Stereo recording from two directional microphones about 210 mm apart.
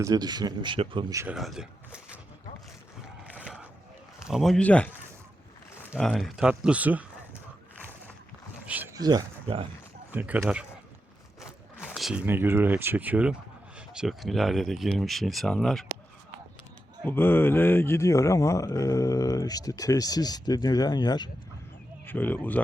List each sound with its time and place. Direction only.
0.0 s speech: 20° right (ahead or behind)
1.2 s speech: 5° right (ahead or behind)
4.3 s speech: centre (ahead or behind)
5.9 s speech: centre (ahead or behind)
8.6 s a sound: 5° right (ahead or behind)
9.0 s speech: 20° right (ahead or behind)
10.1 s speech: 10° right (ahead or behind)
17.1 s speech: 10° left (ahead or behind)
22.0 s speech: 10° left (ahead or behind)